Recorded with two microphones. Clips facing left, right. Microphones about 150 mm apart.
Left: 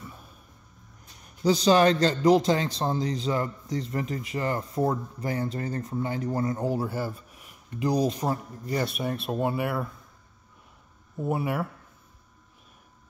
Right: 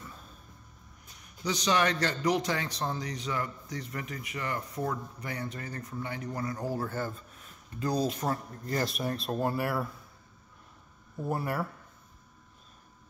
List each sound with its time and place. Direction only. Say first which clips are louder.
1.4 s a man's voice: left 8 dB; 30° left (ahead or behind); by 8.7 s 15° left (ahead or behind)
8.7 s speech: left 3 dB; 5° left (ahead or behind)
11.1 s speech: left 4 dB; 5° left (ahead or behind)